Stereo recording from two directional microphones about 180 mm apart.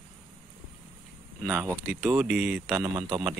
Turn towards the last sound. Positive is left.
turn(degrees=-10)  # may be behind; listen again after turning